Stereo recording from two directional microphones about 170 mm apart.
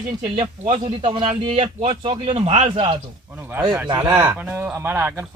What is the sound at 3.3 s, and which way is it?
Speech, 10° right (ahead or behind).